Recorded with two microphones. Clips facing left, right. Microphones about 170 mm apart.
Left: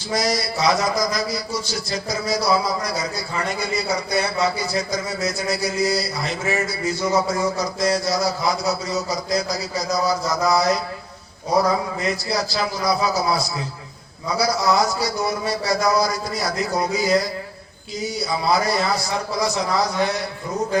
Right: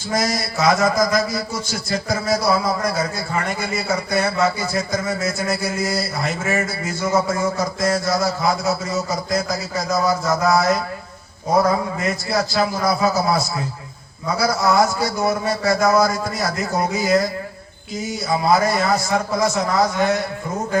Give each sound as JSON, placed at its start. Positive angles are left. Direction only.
{"t": 0.1, "sound": "a man's voice", "side_deg": -50}
{"t": 11.9, "sound": "a man's voice", "side_deg": -50}